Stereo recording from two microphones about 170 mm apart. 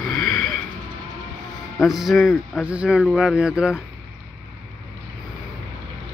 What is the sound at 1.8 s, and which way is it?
Speech, centre (ahead or behind).